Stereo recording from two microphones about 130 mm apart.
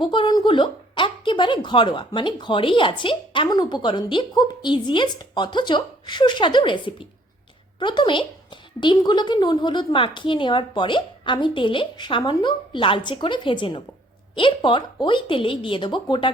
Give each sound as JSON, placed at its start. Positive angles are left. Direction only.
{"t": 0.0, "sound": "a woman's voice", "side_deg": 40}